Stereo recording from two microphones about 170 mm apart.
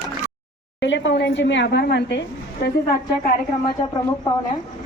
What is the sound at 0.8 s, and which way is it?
A woman's voice, 90° left.